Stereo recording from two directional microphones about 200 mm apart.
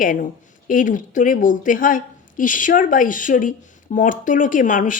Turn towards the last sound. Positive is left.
turn(degrees=40)  # may be behind; listen again after turning